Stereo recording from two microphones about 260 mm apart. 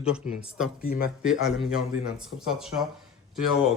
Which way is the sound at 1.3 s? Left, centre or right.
Centre.